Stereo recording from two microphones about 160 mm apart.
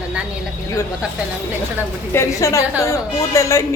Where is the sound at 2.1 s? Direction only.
15° left (ahead or behind).